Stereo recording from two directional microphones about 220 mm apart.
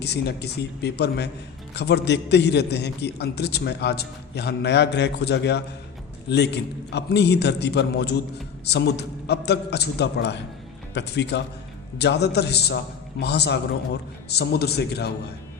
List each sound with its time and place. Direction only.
0.0 s a man's voice: 50° left (ahead or behind)